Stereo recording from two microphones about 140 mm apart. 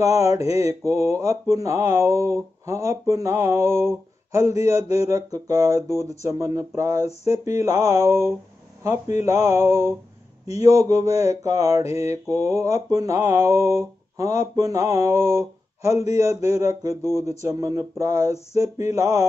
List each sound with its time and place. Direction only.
0.0 s mantra: 20° right (ahead or behind)